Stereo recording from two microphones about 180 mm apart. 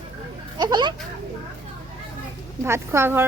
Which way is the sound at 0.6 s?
25° right (ahead or behind).